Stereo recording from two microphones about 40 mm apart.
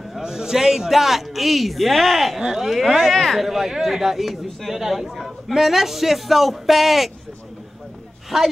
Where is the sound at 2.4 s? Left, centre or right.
Centre.